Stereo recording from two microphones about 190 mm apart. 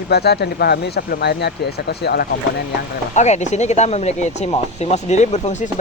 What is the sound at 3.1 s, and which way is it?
Speech, 40° left (ahead or behind).